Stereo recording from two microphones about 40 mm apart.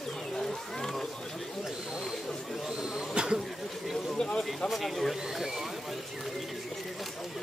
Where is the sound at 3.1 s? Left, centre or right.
Right.